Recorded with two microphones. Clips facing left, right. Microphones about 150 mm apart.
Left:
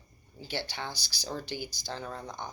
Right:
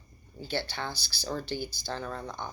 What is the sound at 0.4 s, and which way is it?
Speech, 15° left (ahead or behind).